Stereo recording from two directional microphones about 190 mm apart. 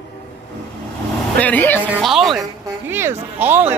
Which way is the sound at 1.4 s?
10° left (ahead or behind).